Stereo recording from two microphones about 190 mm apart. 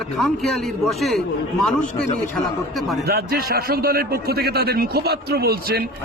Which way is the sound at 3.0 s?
55° right (ahead or behind).